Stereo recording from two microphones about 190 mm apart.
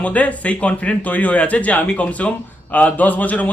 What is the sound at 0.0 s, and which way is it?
A man's voice, 5° left (ahead or behind).